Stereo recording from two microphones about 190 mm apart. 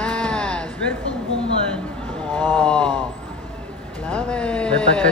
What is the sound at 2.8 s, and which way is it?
Speech, 25° right (ahead or behind).